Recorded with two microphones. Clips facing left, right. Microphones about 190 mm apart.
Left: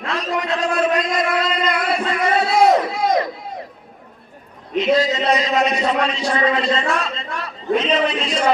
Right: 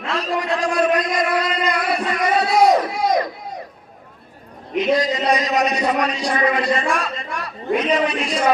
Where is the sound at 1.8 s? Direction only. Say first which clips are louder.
Left 1 dB; 25° left (ahead or behind).